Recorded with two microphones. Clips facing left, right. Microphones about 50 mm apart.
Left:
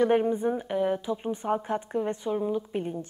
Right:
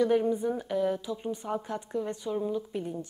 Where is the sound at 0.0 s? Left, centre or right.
Left.